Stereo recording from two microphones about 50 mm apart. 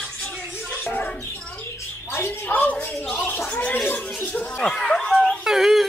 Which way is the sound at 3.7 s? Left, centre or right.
Left.